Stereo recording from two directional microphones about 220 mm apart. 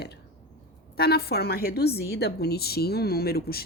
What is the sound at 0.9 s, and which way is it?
A woman's voice, 45° left (ahead or behind).